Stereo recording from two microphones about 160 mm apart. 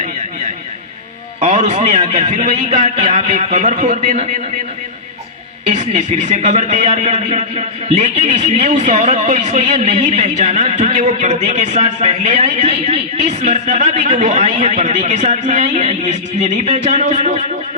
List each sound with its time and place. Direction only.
1.4 s speech: 45° right (ahead or behind)
5.6 s speech: 45° right (ahead or behind)